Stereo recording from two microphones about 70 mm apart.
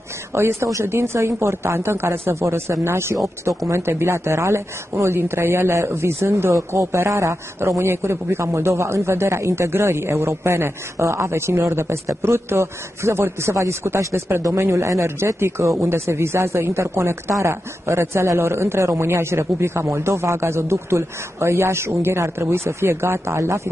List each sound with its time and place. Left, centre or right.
0.3 s a man's voice: right